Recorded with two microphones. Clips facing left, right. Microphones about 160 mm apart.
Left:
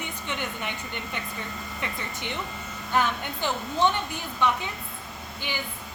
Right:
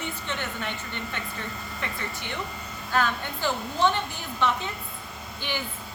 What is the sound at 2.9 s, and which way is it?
Speech, 20° left (ahead or behind).